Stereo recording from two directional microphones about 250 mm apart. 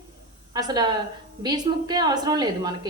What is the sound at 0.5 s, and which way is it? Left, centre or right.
Speech, centre.